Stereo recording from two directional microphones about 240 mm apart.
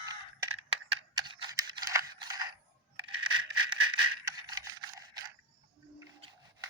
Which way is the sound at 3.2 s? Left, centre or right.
Right.